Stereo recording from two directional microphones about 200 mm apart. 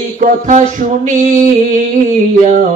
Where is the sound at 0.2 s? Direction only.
40° right (ahead or behind).